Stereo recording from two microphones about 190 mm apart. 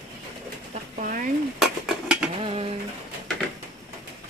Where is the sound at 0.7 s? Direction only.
45° right (ahead or behind).